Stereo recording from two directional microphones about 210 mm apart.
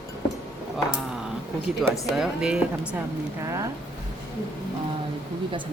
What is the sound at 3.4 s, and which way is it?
Speech, 15° right (ahead or behind).